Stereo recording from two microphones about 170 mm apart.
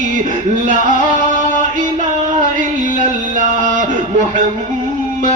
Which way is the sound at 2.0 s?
45° right (ahead or behind).